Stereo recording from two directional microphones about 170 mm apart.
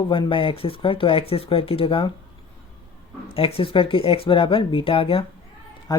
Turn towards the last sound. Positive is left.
turn(degrees=20)  # may be behind; listen again after turning